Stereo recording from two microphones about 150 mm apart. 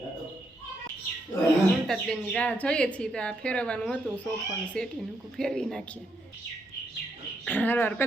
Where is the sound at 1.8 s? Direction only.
5° left (ahead or behind).